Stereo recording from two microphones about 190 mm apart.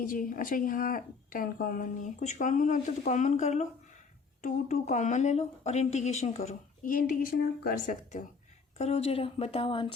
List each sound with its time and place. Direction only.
0.0 s a woman's voice: 45° left (ahead or behind)
8.8 s speech: 30° left (ahead or behind)